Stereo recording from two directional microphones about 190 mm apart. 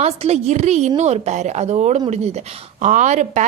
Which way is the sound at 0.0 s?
35° right (ahead or behind).